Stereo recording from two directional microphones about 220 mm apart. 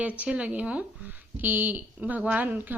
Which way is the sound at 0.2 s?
5° right (ahead or behind).